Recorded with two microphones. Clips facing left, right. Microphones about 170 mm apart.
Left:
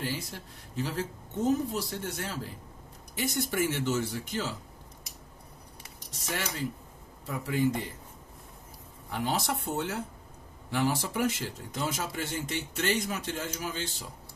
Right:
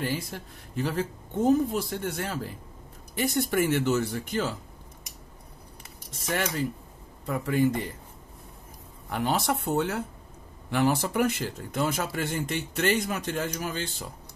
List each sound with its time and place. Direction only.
0.0 s speech: 55° right (ahead or behind)
7.2 s speech: 55° right (ahead or behind)
9.1 s speech: 60° right (ahead or behind)